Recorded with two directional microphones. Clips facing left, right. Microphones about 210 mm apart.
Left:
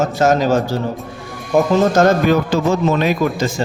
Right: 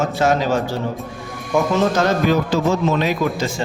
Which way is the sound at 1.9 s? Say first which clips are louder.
Left 4 dB; 50° left (ahead or behind).